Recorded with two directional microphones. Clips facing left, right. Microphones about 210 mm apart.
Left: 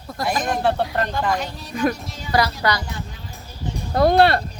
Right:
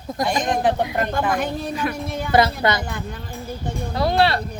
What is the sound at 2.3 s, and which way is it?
Speech, 25° right (ahead or behind).